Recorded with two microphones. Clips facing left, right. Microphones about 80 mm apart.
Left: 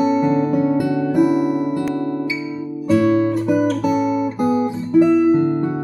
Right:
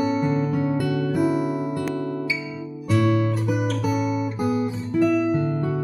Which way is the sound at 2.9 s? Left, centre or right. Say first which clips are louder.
Left 6 dB; centre.